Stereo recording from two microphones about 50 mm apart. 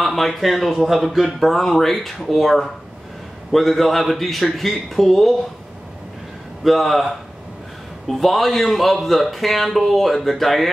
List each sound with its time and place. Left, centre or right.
0.0 s speech: centre
6.6 s speech: centre